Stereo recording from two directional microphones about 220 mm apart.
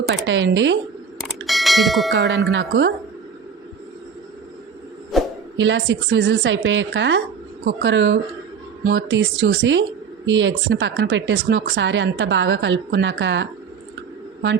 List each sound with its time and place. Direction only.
0.1 s a woman's voice: 55° right (ahead or behind)
1.5 s bell: centre (ahead or behind)
2.1 s speech: 50° right (ahead or behind)
5.1 s a sound: centre (ahead or behind)
5.5 s a woman's voice: 55° right (ahead or behind)